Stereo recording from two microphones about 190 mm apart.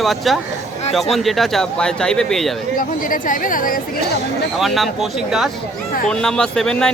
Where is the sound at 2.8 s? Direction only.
45° left (ahead or behind).